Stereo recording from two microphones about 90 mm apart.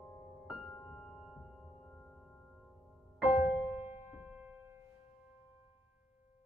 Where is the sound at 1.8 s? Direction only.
15° left (ahead or behind).